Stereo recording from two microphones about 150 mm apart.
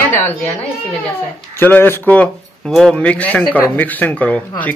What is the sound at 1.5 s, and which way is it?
Speech, 15° left (ahead or behind).